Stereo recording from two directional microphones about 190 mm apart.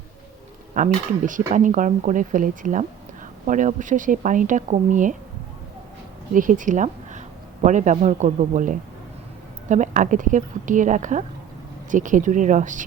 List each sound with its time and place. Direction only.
0.7 s speech: 45° right (ahead or behind)
6.3 s a woman's voice: 45° right (ahead or behind)